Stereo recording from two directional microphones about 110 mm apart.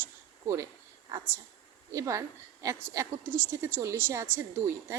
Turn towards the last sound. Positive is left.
turn(degrees=-25)  # may be behind; listen again after turning